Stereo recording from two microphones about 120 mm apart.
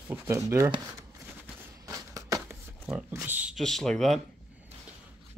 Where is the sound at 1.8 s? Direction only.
30° right (ahead or behind).